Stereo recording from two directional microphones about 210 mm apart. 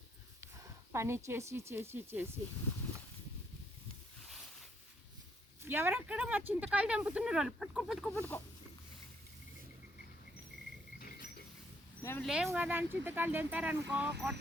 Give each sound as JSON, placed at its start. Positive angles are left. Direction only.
{"t": 0.4, "sound": "a woman's voice", "side_deg": -15}
{"t": 5.6, "sound": "speech", "side_deg": -10}
{"t": 8.1, "sound": "a sound", "side_deg": 10}
{"t": 11.0, "sound": "cricket", "side_deg": 50}
{"t": 12.0, "sound": "a sound", "side_deg": 10}
{"t": 12.5, "sound": "speech", "side_deg": -10}